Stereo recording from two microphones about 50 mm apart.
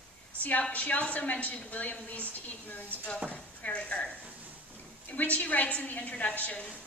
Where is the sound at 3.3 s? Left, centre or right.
Left.